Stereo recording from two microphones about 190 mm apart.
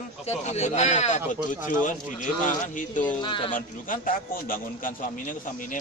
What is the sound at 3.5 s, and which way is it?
A man's voice, 45° left (ahead or behind).